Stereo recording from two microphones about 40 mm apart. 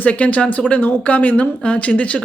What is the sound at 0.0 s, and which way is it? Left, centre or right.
Speech, left.